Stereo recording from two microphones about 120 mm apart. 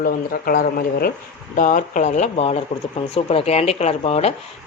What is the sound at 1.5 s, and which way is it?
Speech, 90° left.